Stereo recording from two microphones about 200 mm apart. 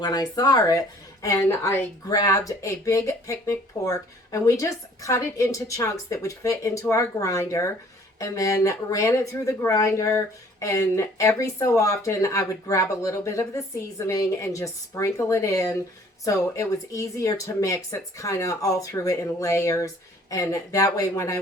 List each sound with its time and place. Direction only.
0.0 s speech: 20° left (ahead or behind)